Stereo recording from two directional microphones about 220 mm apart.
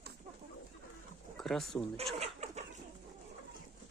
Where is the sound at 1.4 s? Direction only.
Centre (ahead or behind).